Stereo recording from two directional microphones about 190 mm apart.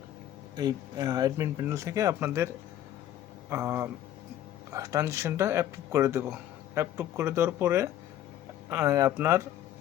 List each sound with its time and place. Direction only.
0.5 s speech: 20° right (ahead or behind)
3.5 s speech: 15° right (ahead or behind)